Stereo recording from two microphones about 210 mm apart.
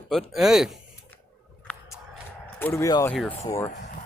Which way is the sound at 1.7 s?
5° left (ahead or behind).